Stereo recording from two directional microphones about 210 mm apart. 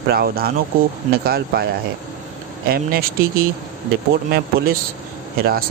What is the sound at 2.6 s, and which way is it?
Speech, 45° right (ahead or behind).